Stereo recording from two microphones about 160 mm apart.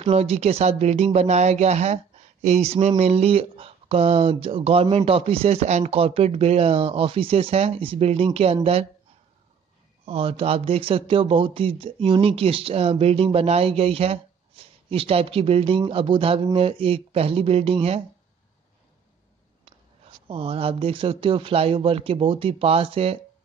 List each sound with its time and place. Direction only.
0.0 s speech: 40° right (ahead or behind)
10.0 s speech: 35° right (ahead or behind)
20.2 s speech: 35° right (ahead or behind)